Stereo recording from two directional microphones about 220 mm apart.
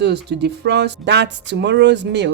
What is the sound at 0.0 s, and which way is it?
Speech, 50° right (ahead or behind).